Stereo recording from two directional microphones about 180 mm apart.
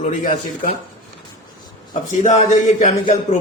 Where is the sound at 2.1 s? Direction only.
45° left (ahead or behind).